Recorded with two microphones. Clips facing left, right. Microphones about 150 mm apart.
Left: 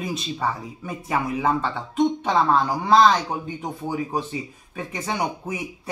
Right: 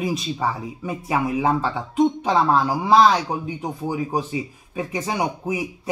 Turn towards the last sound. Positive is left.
turn(degrees=-10)  # may be behind; listen again after turning